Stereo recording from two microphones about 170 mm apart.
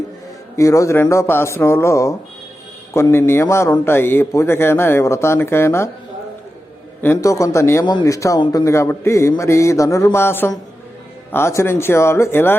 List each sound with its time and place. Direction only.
0.5 s a man's voice: 20° left (ahead or behind)
7.0 s a man's voice: 15° left (ahead or behind)